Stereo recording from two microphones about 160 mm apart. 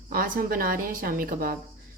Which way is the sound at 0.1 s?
65° right (ahead or behind).